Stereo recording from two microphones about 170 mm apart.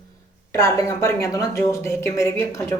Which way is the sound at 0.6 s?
20° left (ahead or behind).